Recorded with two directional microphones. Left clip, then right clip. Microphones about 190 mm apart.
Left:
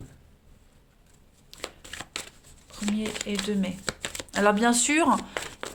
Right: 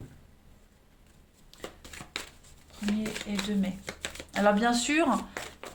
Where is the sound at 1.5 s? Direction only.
35° left (ahead or behind).